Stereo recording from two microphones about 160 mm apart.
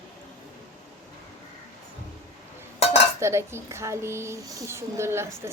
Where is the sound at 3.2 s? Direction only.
15° right (ahead or behind).